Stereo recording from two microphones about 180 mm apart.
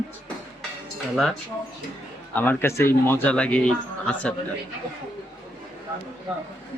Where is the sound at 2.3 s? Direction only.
10° left (ahead or behind).